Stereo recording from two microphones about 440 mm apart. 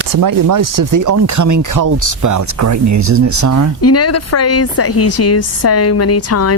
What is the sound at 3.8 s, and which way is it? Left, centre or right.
A woman's voice, left.